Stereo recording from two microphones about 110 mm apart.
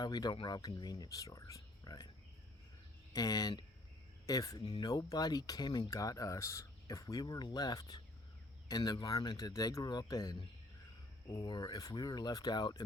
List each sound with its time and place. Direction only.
0.0 s speech: 40° left (ahead or behind)
3.1 s speech: 35° left (ahead or behind)